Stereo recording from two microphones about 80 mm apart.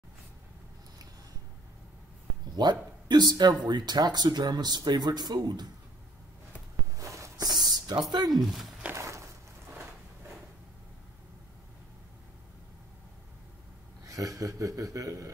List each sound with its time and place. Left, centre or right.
2.5 s speech: right
7.0 s a sound: right
7.7 s speech: right
8.5 s speech: centre
8.9 s a sound: right
14.0 s a man's voice: right